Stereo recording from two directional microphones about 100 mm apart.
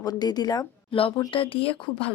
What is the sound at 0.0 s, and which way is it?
Speech, 40° left (ahead or behind).